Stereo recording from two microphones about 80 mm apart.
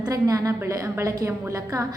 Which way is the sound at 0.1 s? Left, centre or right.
Right.